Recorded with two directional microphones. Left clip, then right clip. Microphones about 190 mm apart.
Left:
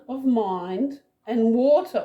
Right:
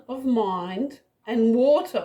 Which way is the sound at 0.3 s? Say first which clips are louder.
Left 1 dB; 35° right (ahead or behind).